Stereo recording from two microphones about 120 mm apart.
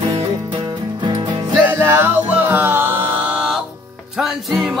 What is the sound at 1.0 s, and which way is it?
Music, 40° right (ahead or behind).